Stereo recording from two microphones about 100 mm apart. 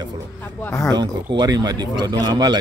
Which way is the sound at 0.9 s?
45° right (ahead or behind).